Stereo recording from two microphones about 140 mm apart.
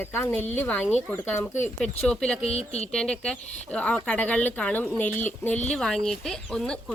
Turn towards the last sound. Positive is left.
turn(degrees=5)  # may be behind; listen again after turning